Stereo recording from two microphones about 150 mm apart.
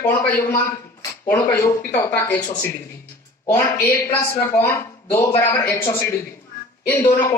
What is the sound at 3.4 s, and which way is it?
Speech, 20° left (ahead or behind).